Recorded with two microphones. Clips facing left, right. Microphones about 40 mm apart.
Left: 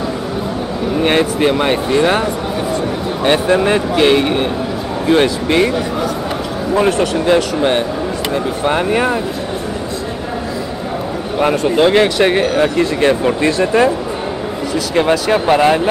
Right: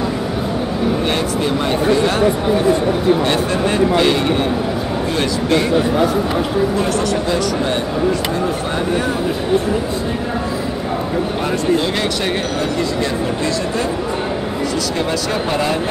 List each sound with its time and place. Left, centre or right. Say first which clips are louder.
1.0 s a man's voice: left 5 dB; left
1.9 s speech: even; left
3.4 s speech: left 3 dB; left
6.7 s a man's voice: left 4 dB; left
11.7 s speech: left 7 dB; left
13.0 s speech: left 6 dB; left
15.2 s speech: left 7 dB; left